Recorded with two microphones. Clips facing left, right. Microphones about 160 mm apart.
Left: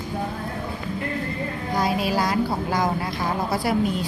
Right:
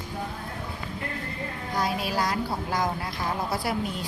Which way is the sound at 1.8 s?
90° left.